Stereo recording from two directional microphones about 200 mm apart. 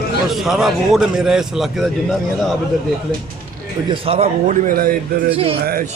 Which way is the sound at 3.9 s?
30° right (ahead or behind).